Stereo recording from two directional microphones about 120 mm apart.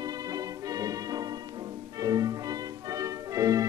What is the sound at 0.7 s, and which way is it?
Music, 30° right (ahead or behind).